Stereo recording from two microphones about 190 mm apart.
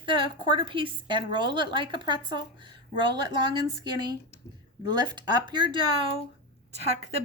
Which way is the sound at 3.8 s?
25° right (ahead or behind).